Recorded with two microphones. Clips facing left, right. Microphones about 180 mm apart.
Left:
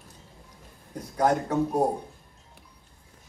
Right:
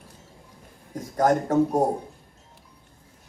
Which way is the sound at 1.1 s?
45° right (ahead or behind).